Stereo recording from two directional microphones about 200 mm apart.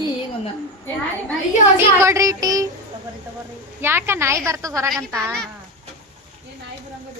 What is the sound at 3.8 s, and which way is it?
A woman's voice, 10° right (ahead or behind).